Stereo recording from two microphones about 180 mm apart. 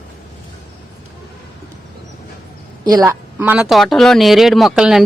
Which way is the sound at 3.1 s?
10° right (ahead or behind).